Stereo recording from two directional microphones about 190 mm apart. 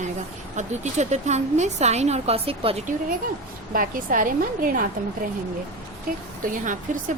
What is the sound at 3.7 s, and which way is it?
A woman's voice, 45° right (ahead or behind).